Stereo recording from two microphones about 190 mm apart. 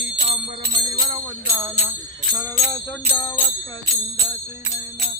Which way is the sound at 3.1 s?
10° left (ahead or behind).